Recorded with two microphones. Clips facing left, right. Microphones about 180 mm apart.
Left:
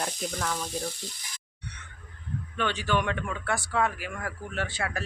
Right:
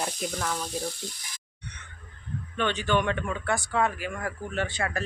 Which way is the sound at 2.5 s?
5° left (ahead or behind).